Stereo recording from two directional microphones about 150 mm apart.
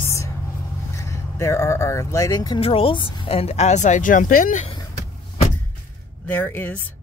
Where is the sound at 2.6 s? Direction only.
40° left (ahead or behind); by 4.6 s 65° left (ahead or behind).